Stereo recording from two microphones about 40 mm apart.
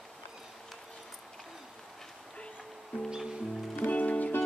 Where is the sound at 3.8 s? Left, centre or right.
Left.